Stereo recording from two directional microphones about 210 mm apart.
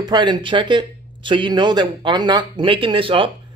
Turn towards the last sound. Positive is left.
turn(degrees=-25)  # may be behind; listen again after turning